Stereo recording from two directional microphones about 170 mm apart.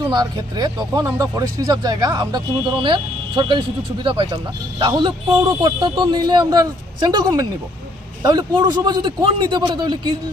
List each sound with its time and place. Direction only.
0.1 s a man's voice: 25° right (ahead or behind)